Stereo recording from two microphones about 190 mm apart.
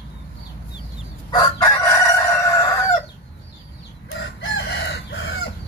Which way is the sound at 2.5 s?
15° left (ahead or behind).